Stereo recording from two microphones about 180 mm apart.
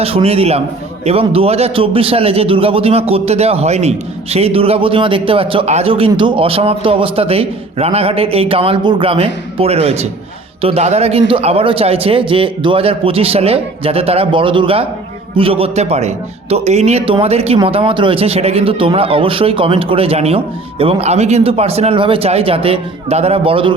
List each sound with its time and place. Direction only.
0.0 s a man's voice: 35° right (ahead or behind)